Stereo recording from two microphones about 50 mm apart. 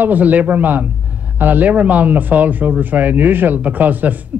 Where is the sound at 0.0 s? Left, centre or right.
Right.